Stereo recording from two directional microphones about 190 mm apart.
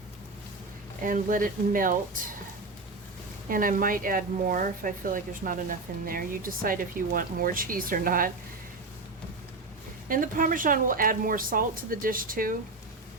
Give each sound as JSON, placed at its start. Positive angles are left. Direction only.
{"t": 1.0, "sound": "speech", "side_deg": -45}
{"t": 3.5, "sound": "speech", "side_deg": -45}
{"t": 10.1, "sound": "speech", "side_deg": -45}